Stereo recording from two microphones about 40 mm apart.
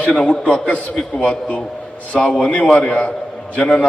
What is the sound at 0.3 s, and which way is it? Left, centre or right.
A man's voice, left.